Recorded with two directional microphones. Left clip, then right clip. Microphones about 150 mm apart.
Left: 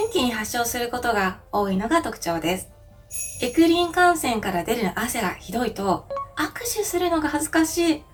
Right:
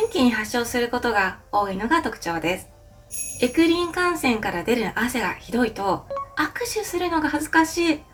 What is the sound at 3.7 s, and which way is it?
A woman's voice, 25° right (ahead or behind).